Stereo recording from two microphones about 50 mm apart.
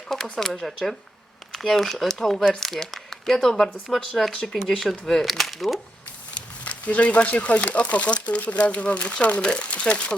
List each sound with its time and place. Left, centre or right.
0.3 s speech: centre
6.7 s speech: left